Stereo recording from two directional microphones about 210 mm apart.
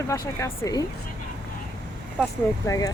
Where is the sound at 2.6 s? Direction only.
15° left (ahead or behind).